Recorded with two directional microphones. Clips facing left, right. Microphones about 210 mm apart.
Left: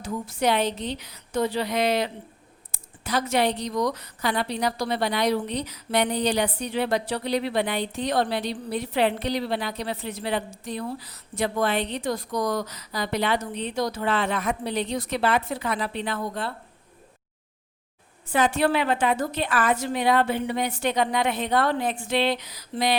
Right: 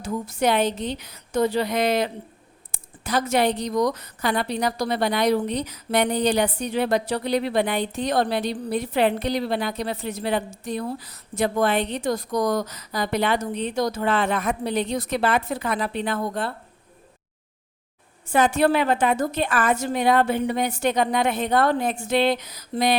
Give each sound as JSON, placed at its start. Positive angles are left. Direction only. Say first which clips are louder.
{"t": 0.0, "sound": "a woman's voice", "louder": "right 2 dB", "side_deg": -45}
{"t": 18.3, "sound": "a woman's voice", "louder": "right 3 dB", "side_deg": -45}